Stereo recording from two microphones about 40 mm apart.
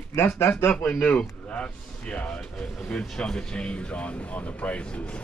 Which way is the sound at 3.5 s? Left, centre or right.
Left.